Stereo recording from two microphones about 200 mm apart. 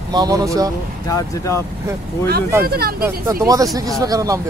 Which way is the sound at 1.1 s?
15° left (ahead or behind).